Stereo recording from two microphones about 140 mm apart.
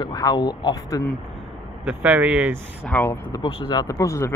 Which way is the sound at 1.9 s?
10° right (ahead or behind).